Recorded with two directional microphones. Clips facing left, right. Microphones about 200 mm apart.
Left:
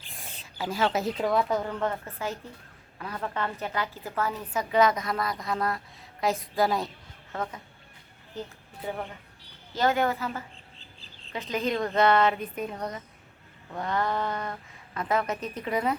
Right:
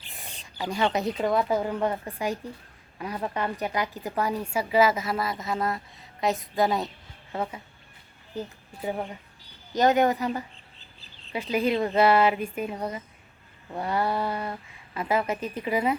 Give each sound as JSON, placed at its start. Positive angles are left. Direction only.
{"t": 0.1, "sound": "a sound", "side_deg": 0}
{"t": 0.6, "sound": "a woman's voice", "side_deg": 0}
{"t": 7.3, "sound": "a woman's voice", "side_deg": -10}
{"t": 8.9, "sound": "a woman's voice", "side_deg": -15}
{"t": 11.5, "sound": "a woman's voice", "side_deg": -10}
{"t": 13.7, "sound": "a woman's voice", "side_deg": -10}